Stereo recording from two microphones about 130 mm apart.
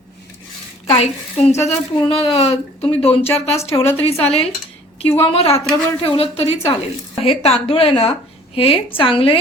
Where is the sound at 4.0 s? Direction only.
50° left (ahead or behind).